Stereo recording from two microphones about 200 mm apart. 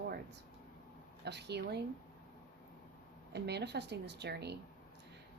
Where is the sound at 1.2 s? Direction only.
55° right (ahead or behind).